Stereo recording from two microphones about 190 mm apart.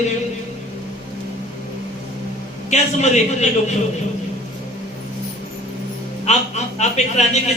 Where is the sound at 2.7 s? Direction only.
35° left (ahead or behind).